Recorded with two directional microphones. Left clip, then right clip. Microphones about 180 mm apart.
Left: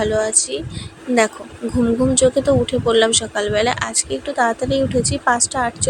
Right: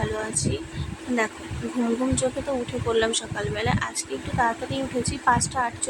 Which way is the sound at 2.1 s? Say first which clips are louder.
Left 11 dB; 25° left (ahead or behind).